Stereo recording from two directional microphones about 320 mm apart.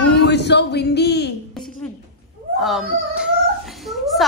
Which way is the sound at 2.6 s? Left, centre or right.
Centre.